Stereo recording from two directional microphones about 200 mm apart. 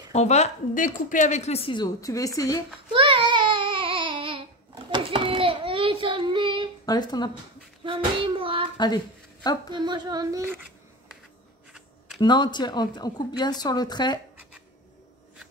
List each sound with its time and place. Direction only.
0.1 s a woman's voice: 35° left (ahead or behind); by 2.6 s 15° left (ahead or behind)
2.9 s babbling: 25° right (ahead or behind)
4.9 s a sound: 25° right (ahead or behind)
6.9 s a woman's voice: 20° left (ahead or behind)
7.8 s child singing: 25° right (ahead or behind)
8.7 s a sound: 20° left (ahead or behind)
9.7 s speech: 25° right (ahead or behind)
12.2 s a woman's voice: 20° left (ahead or behind)